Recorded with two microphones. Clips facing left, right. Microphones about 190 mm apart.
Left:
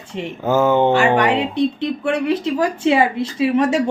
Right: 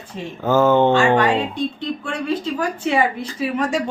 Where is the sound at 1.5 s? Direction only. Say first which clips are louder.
Left 5 dB; 70° left (ahead or behind).